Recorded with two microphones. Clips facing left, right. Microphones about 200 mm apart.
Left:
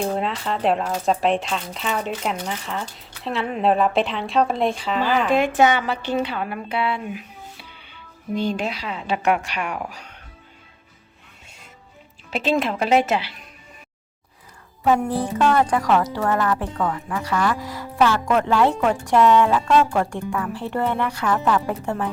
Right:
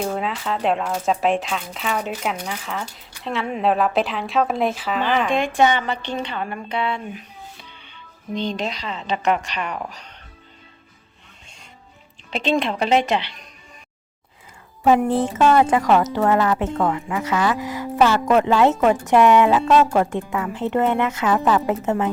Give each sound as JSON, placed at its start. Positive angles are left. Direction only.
{"t": 0.0, "sound": "speech", "side_deg": 0}
{"t": 12.3, "sound": "speech", "side_deg": 5}
{"t": 14.8, "sound": "a woman's voice", "side_deg": -25}